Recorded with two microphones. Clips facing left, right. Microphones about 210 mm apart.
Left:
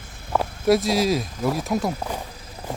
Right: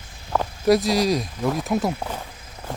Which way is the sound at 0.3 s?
Centre (ahead or behind).